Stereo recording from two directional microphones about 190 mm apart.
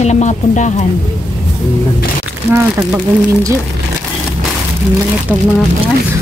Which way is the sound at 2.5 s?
10° right (ahead or behind).